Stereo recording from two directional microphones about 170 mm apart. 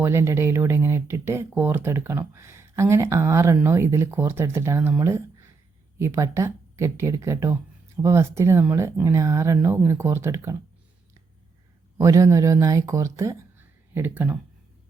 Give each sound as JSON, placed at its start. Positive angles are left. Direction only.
{"t": 0.0, "sound": "speech", "side_deg": -15}
{"t": 11.9, "sound": "speech", "side_deg": -20}